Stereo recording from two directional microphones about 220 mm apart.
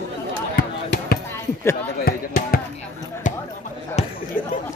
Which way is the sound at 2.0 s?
40° left (ahead or behind).